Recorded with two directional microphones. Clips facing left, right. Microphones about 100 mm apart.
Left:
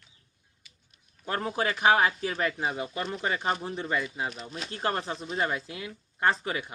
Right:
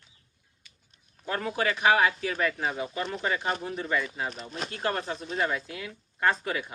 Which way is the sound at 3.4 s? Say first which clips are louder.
Left 1 dB; 25° left (ahead or behind).